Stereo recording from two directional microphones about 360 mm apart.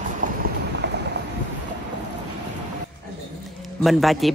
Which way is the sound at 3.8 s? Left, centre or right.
Centre.